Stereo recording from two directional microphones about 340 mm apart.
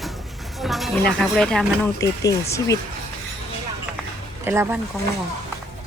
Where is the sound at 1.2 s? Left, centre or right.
Centre.